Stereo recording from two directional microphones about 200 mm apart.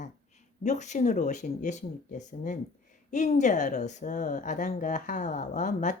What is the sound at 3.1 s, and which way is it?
Speech, 35° left (ahead or behind).